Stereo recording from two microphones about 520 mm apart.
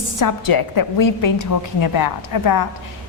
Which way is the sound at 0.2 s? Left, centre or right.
Left.